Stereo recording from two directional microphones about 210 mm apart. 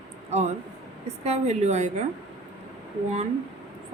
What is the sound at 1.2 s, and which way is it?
Speech, 30° right (ahead or behind).